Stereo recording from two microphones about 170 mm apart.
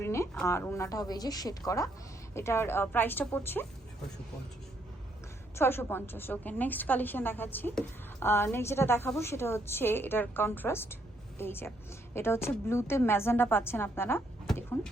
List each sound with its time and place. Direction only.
0.0 s a woman's voice: 15° left (ahead or behind)
5.5 s a woman's voice: 15° left (ahead or behind)